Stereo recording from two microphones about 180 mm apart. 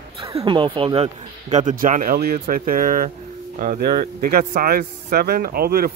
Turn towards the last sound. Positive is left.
turn(degrees=-60)  # may be behind; listen again after turning